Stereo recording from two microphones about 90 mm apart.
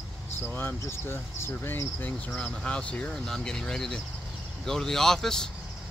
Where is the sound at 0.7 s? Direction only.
30° left (ahead or behind).